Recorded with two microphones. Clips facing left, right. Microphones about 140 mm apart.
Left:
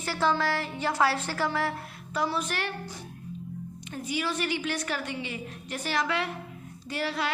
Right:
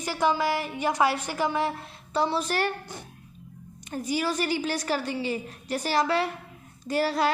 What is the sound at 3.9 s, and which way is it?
A woman's voice, 40° right (ahead or behind).